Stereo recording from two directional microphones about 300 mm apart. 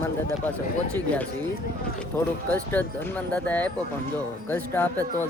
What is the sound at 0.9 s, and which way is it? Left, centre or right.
Speech, centre.